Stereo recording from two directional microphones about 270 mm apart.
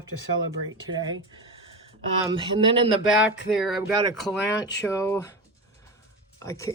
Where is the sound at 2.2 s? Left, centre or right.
Centre.